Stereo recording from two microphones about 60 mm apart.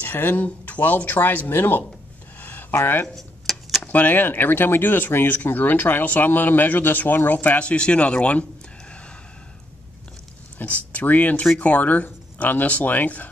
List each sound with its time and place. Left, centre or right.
0.0 s speech: left
3.2 s a sound: centre
3.8 s speech: left
10.6 s speech: left